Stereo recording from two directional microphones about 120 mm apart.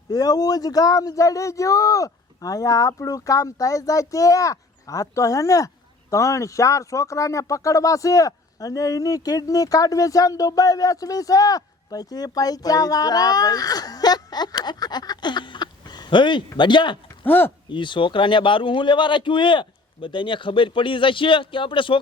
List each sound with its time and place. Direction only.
0.1 s speech: 30° left (ahead or behind)
17.2 s speech: 15° left (ahead or behind)
17.7 s a man's voice: 40° left (ahead or behind)